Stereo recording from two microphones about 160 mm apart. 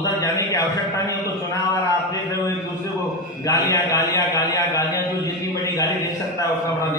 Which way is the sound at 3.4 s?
20° left (ahead or behind).